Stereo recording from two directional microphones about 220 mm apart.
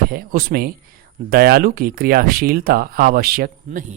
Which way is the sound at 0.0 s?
40° right (ahead or behind).